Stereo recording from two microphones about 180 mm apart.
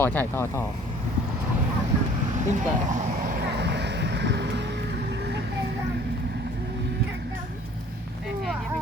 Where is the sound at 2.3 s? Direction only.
45° right (ahead or behind); by 7.0 s 65° right (ahead or behind).